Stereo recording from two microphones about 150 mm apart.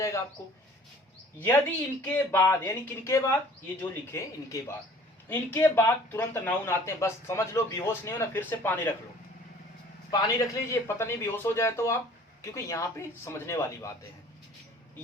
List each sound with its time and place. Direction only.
1.4 s a man's voice: 15° left (ahead or behind)
10.1 s a man's voice: 25° left (ahead or behind)